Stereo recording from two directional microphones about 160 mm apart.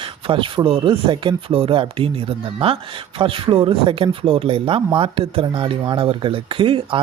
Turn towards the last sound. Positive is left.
turn(degrees=-35)  # may be behind; listen again after turning